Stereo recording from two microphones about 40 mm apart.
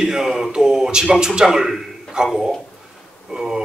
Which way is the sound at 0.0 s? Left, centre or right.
Centre.